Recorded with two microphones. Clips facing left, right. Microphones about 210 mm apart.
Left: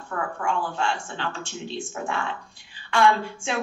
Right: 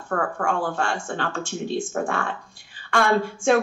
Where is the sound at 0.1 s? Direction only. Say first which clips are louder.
Right 3 dB; 50° right (ahead or behind).